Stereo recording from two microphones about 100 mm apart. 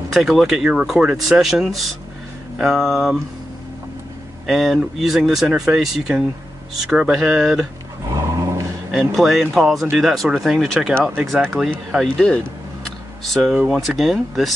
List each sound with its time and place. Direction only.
0.1 s speech: centre (ahead or behind)
4.5 s speech: centre (ahead or behind)
8.1 s a sound: 35° right (ahead or behind)
8.9 s speech: 5° right (ahead or behind)
13.3 s speech: centre (ahead or behind)